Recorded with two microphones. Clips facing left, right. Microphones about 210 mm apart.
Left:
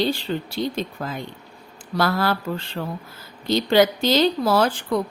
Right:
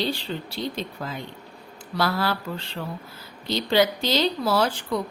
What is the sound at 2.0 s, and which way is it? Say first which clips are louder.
A woman's voice: left 3 dB; 50° left (ahead or behind).